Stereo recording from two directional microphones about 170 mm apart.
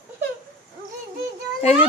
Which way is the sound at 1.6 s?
40° left (ahead or behind).